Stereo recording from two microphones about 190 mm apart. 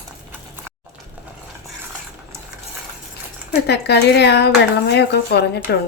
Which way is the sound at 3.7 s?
60° left (ahead or behind).